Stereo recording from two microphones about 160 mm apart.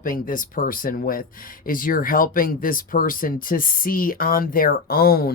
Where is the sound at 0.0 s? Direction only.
60° left (ahead or behind).